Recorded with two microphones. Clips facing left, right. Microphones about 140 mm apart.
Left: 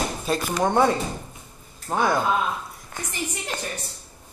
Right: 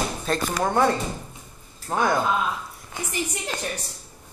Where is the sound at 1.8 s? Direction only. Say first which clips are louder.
Even; centre (ahead or behind).